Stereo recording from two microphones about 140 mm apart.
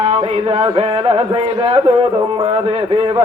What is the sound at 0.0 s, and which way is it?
Speech, 45° right (ahead or behind).